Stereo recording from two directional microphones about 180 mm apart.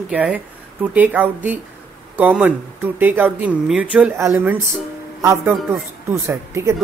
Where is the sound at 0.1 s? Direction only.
5° right (ahead or behind).